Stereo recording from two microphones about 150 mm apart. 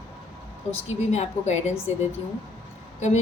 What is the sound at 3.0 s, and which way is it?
Speech, 50° left (ahead or behind).